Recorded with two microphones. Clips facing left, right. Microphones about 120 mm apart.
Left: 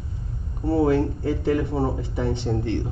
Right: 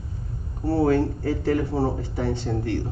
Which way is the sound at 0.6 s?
20° left (ahead or behind).